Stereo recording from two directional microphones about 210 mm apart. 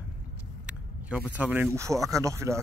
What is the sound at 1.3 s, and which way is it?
Speech, 10° right (ahead or behind).